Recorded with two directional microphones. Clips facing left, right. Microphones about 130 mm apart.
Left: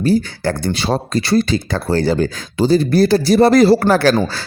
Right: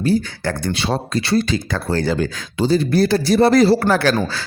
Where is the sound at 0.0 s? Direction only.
35° left (ahead or behind).